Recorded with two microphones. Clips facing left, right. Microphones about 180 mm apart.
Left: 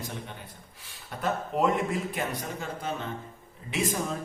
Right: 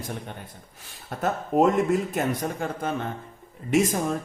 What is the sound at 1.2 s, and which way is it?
A man's voice, 45° right (ahead or behind).